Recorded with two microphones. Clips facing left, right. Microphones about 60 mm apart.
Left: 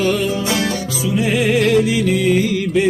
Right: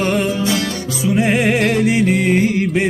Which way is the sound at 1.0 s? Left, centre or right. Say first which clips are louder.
Right 2 dB; right.